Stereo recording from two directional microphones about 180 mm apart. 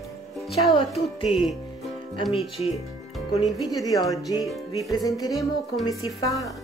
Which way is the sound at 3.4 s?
20° left (ahead or behind).